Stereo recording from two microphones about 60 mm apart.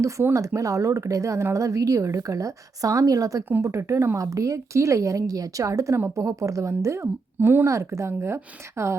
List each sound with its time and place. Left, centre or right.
0.3 s speech: right
3.6 s speech: right
4.2 s a woman's voice: right